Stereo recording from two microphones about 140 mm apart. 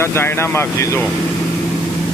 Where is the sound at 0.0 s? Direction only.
15° left (ahead or behind).